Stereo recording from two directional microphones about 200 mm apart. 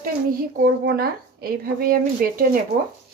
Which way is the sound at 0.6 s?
55° right (ahead or behind).